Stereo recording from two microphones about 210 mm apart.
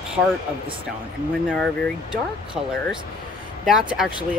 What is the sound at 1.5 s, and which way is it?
Speech, 5° left (ahead or behind).